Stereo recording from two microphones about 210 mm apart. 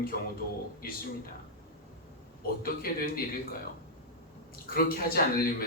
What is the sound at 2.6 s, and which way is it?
Speech, 45° left (ahead or behind).